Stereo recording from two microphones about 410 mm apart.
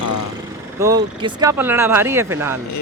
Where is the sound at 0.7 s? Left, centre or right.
Centre.